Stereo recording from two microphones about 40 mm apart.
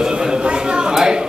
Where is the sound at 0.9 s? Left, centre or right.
Centre.